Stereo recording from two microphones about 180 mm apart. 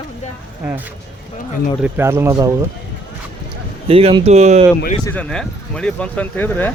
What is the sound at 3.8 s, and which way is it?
Speech, 30° right (ahead or behind).